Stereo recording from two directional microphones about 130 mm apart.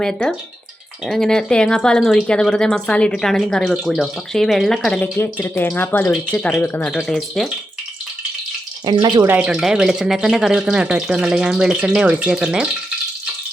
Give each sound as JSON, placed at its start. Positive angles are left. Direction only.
{"t": 0.0, "sound": "speech", "side_deg": 5}
{"t": 5.0, "sound": "speech", "side_deg": 20}
{"t": 8.8, "sound": "speech", "side_deg": -35}
{"t": 9.2, "sound": "speech", "side_deg": -15}
{"t": 9.5, "sound": "speech", "side_deg": -5}